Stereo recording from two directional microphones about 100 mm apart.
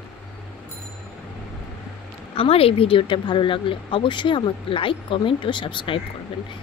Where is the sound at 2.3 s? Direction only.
75° left (ahead or behind).